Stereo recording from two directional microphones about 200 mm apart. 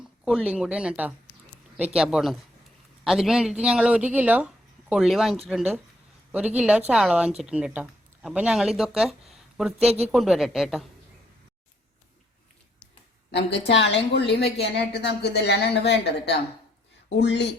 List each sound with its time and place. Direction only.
0.3 s speech: 5° right (ahead or behind)
13.3 s a woman's voice: 60° left (ahead or behind)